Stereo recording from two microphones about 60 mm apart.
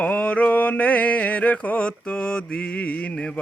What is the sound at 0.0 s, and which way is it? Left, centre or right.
Mantra, left.